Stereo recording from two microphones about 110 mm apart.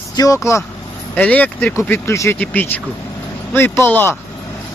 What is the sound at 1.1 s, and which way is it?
Speech, 10° left (ahead or behind).